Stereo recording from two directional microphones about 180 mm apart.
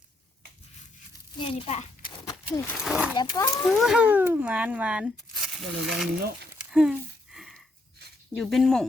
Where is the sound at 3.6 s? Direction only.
Centre (ahead or behind).